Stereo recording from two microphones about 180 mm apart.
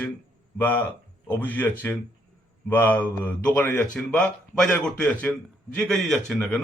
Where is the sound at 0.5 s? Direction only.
10° left (ahead or behind).